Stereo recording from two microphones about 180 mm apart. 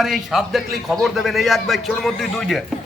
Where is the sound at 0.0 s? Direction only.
Centre (ahead or behind).